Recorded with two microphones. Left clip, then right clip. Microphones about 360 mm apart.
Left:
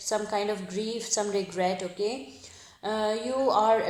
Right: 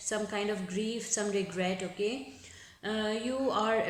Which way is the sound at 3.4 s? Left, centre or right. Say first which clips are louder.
Left 8 dB; centre.